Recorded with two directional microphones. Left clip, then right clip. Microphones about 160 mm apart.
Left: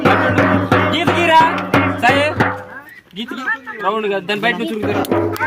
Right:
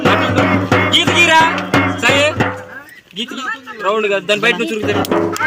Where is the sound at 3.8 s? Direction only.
45° left (ahead or behind).